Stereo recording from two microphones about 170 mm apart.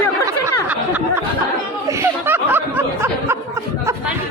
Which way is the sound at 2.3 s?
10° right (ahead or behind).